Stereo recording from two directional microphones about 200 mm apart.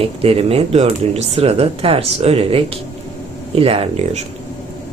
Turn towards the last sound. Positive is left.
turn(degrees=-30)  # may be behind; listen again after turning